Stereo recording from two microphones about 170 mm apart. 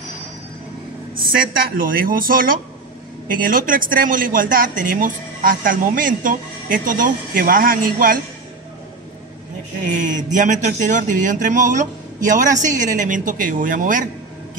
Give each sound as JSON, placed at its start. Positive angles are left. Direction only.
{"t": 1.2, "sound": "speech", "side_deg": -60}
{"t": 9.8, "sound": "speech", "side_deg": -45}